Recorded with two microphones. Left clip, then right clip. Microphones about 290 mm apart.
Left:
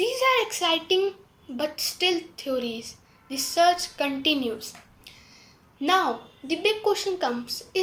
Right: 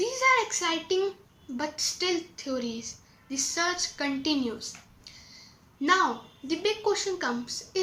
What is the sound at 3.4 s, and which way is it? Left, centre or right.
Speech, centre.